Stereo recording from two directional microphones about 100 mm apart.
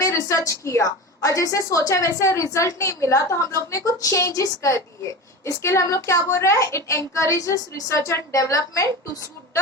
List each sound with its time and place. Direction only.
0.0 s a woman's voice: 30° left (ahead or behind)